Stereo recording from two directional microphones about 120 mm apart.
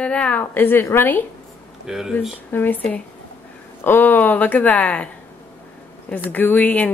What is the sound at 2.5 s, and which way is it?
Speech, 15° left (ahead or behind).